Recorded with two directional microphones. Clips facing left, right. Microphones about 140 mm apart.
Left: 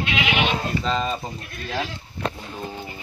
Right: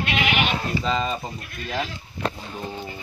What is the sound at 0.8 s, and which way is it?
Speech, centre (ahead or behind).